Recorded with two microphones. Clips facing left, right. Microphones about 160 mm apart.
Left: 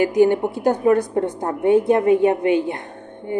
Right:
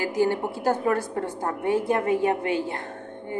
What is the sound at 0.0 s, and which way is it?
A woman's voice, 20° left (ahead or behind).